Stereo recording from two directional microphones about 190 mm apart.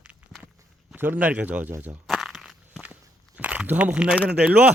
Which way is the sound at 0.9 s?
10° right (ahead or behind).